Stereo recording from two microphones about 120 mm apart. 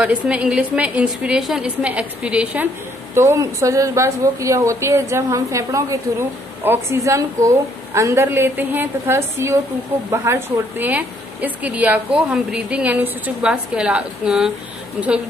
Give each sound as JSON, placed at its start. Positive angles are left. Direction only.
{"t": 0.0, "sound": "speech", "side_deg": -10}
{"t": 3.2, "sound": "a woman's voice", "side_deg": -25}